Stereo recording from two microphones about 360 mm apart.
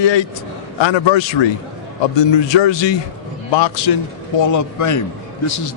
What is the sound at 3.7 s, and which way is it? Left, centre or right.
Speech, left.